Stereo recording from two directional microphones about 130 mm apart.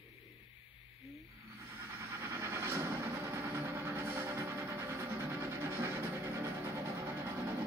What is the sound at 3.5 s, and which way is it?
Music, 20° right (ahead or behind).